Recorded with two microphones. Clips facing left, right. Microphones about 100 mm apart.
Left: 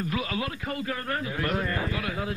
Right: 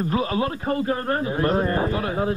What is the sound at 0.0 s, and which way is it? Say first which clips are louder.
Speech: right 7 dB; 35° right (ahead or behind).